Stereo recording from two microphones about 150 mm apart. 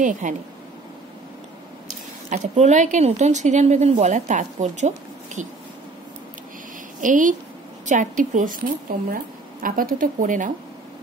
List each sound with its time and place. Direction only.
0.0 s a woman's voice: 55° right (ahead or behind)
2.2 s speech: 55° right (ahead or behind)
7.0 s a woman's voice: 60° right (ahead or behind)